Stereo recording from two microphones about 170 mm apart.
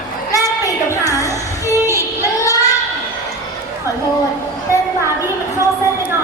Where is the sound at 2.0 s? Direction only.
20° left (ahead or behind).